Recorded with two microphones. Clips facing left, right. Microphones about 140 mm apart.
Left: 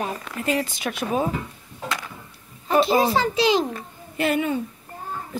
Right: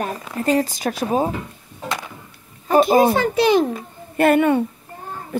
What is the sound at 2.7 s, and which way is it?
A child's voice, 50° right (ahead or behind).